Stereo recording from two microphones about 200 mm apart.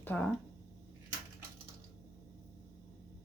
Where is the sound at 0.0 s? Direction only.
10° left (ahead or behind).